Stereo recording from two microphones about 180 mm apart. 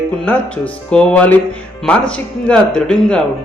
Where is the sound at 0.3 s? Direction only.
5° left (ahead or behind).